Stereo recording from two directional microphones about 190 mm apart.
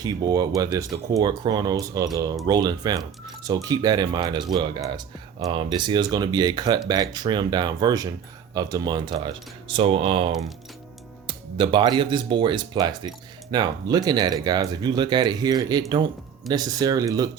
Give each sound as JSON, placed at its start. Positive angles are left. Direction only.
{"t": 0.0, "sound": "speech", "side_deg": -20}